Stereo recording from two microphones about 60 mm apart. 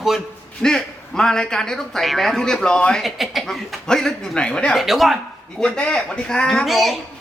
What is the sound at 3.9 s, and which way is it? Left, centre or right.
Speech, centre.